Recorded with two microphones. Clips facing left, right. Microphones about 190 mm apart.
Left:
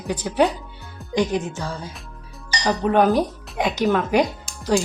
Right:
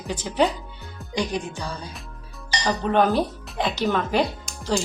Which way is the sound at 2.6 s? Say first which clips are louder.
Left 3 dB; 15° left (ahead or behind).